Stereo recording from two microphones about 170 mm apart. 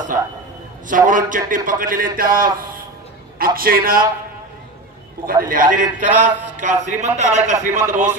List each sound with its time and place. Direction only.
0.8 s a man's voice: 50° right (ahead or behind)
5.2 s a man's voice: 55° right (ahead or behind)
6.0 s mantra: 10° right (ahead or behind)
6.6 s a man's voice: 45° right (ahead or behind)